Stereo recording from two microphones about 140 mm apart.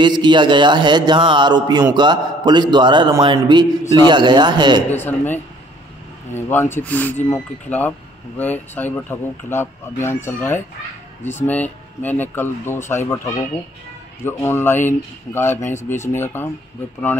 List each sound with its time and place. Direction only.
0.0 s speech: 35° right (ahead or behind)
5.0 s speech: 15° left (ahead or behind)